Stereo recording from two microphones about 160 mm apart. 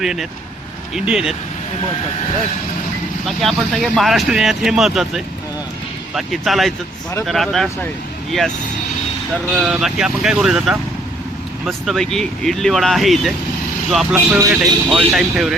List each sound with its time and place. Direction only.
0.0 s speech: centre (ahead or behind)
3.2 s speech: centre (ahead or behind)
9.6 s speech: 5° right (ahead or behind)
14.3 s speech: 20° right (ahead or behind)
14.5 s speech: 5° right (ahead or behind)